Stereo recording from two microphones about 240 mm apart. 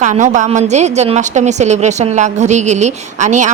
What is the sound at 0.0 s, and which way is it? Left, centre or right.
A woman's voice, right.